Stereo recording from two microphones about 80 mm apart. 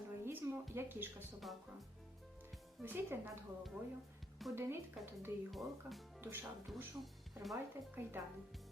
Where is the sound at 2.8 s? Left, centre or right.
Right.